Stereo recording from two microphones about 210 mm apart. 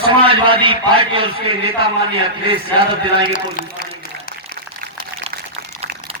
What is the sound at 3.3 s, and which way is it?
Speech, 45° left (ahead or behind).